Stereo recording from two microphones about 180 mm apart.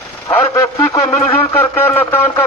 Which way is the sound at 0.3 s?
15° left (ahead or behind).